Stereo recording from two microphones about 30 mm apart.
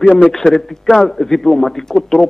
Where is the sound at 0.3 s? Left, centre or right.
Centre.